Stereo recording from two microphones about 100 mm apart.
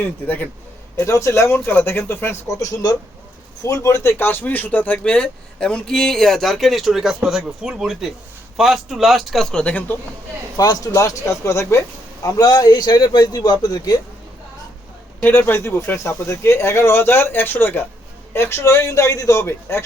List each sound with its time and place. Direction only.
0.0 s a man's voice: 20° left (ahead or behind)
0.9 s a man's voice: 30° left (ahead or behind); by 9.8 s 10° left (ahead or behind)
10.6 s a man's voice: 35° left (ahead or behind)
12.4 s a man's voice: 40° left (ahead or behind)
15.2 s a man's voice: 20° left (ahead or behind)